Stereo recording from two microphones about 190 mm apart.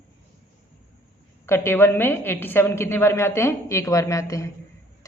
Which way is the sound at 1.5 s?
10° left (ahead or behind).